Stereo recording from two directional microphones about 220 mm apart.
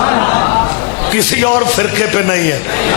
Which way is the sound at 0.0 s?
20° left (ahead or behind).